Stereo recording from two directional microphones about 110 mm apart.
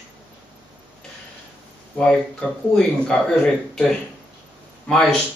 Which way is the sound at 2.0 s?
5° left (ahead or behind).